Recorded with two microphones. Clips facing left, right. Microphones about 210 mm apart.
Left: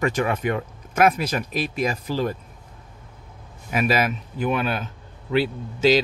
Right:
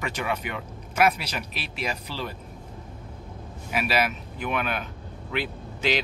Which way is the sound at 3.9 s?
40° left (ahead or behind).